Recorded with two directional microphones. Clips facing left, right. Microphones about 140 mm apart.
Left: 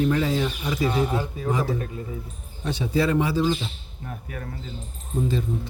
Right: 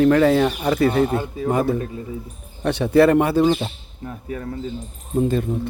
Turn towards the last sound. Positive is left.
turn(degrees=-60)  # may be behind; listen again after turning